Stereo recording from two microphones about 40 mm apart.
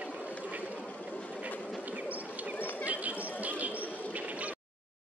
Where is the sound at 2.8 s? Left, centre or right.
Right.